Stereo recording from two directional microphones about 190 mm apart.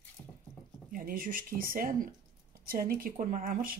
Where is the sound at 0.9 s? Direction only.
50° right (ahead or behind).